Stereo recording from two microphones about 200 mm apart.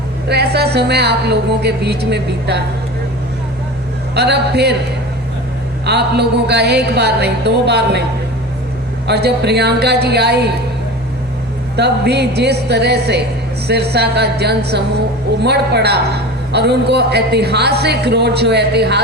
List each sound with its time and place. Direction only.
0.3 s a woman's voice: 55° right (ahead or behind)
4.1 s a woman's voice: 55° right (ahead or behind)
5.8 s a woman's voice: 55° right (ahead or behind)
9.0 s a woman's voice: 55° right (ahead or behind)
11.8 s a woman's voice: 55° right (ahead or behind)